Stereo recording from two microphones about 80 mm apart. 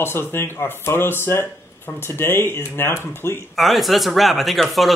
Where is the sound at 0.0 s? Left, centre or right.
Left.